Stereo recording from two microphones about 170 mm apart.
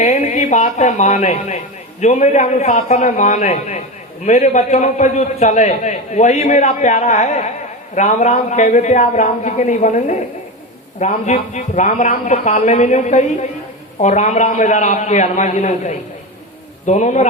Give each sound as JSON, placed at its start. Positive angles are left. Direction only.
{"t": 0.0, "sound": "a man's voice", "side_deg": 40}